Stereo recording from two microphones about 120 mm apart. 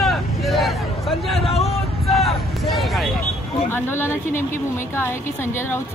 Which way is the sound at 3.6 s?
20° left (ahead or behind).